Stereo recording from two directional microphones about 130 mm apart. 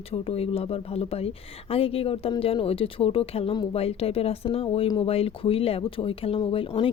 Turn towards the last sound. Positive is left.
turn(degrees=45)  # may be behind; listen again after turning